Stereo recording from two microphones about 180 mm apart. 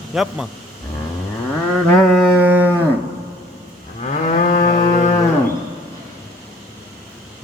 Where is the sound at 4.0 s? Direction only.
40° left (ahead or behind).